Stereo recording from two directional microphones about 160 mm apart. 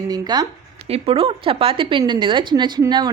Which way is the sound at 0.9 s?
40° right (ahead or behind).